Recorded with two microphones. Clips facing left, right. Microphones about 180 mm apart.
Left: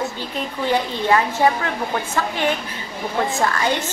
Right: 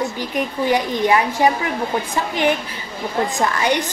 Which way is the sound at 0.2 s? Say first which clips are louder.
Right 4 dB; 15° right (ahead or behind).